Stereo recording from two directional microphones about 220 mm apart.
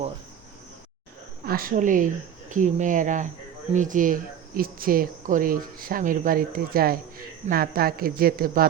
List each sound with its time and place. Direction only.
1.5 s speech: 40° right (ahead or behind)